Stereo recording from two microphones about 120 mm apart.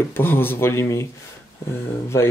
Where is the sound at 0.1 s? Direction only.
20° left (ahead or behind).